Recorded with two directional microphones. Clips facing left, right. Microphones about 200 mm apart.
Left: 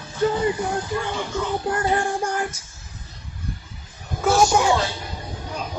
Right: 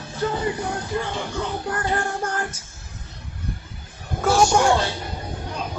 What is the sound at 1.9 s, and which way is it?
Music, 10° left (ahead or behind).